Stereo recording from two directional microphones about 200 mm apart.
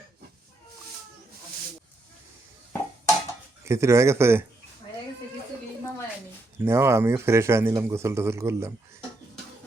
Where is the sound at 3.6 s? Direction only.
15° right (ahead or behind).